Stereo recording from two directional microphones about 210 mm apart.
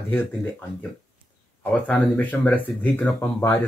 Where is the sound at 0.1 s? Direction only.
10° left (ahead or behind).